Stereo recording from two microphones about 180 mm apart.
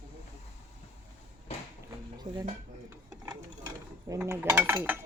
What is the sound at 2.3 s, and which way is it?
Speech, 45° right (ahead or behind).